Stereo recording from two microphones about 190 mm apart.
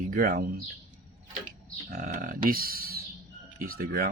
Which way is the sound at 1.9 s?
50° right (ahead or behind).